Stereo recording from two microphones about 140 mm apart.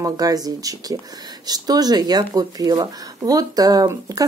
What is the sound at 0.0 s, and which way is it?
Speech, 25° right (ahead or behind).